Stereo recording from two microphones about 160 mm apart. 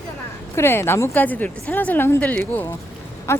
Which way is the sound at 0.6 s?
15° left (ahead or behind).